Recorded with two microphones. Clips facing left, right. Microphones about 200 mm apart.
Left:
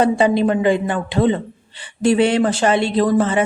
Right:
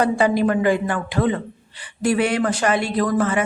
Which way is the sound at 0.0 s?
25° left (ahead or behind).